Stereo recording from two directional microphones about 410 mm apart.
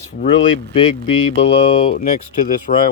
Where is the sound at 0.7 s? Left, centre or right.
Centre.